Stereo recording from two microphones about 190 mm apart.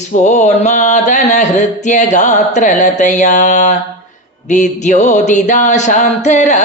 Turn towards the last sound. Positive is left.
turn(degrees=40)  # may be behind; listen again after turning